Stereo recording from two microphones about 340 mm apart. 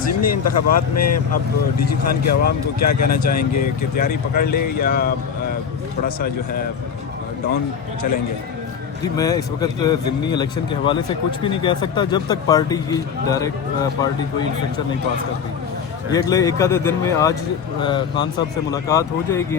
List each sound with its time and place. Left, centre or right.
0.1 s speech: left
2.3 s speech: left
9.1 s speech: centre
16.1 s speech: centre